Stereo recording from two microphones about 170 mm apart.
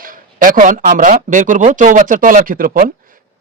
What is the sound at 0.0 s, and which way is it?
Speech, 55° right (ahead or behind).